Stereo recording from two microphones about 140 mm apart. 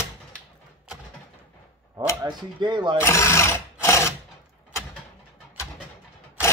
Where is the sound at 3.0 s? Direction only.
20° left (ahead or behind).